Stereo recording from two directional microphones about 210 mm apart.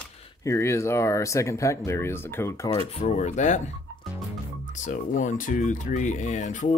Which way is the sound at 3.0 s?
35° left (ahead or behind).